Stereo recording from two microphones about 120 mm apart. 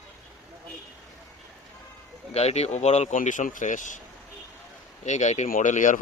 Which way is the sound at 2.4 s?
65° left (ahead or behind).